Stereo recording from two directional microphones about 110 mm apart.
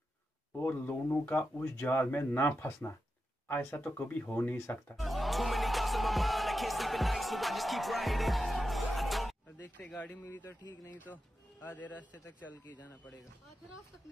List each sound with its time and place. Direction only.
0.6 s speech: 15° left (ahead or behind)
4.9 s music: centre (ahead or behind)
9.6 s speech: 15° left (ahead or behind)